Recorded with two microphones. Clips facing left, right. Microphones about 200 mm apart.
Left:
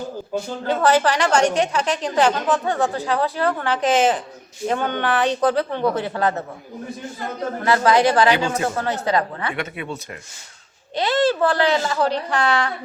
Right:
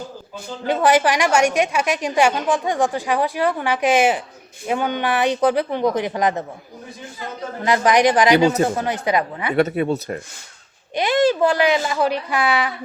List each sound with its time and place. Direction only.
0.7 s a woman's voice: 15° right (ahead or behind)
7.6 s a woman's voice: 15° right (ahead or behind)
9.6 s speech: 40° right (ahead or behind)
10.9 s a woman's voice: 15° right (ahead or behind)